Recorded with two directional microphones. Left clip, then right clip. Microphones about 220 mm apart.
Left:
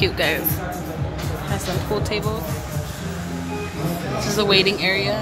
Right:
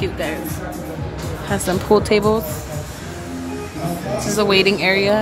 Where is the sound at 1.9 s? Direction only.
35° right (ahead or behind).